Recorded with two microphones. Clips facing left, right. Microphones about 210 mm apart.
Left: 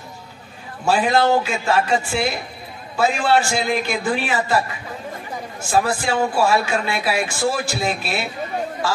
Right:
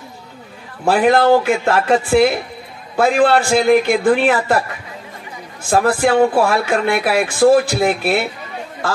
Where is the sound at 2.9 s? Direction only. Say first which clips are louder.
Right 5 dB; 55° right (ahead or behind); by 4.3 s 75° right (ahead or behind).